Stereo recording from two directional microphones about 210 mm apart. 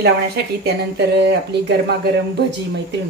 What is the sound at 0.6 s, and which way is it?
Speech, 55° right (ahead or behind).